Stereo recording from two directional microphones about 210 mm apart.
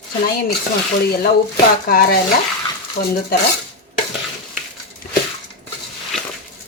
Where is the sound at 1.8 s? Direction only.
45° left (ahead or behind).